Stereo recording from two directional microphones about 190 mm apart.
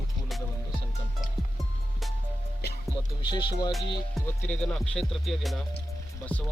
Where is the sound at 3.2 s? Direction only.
25° left (ahead or behind).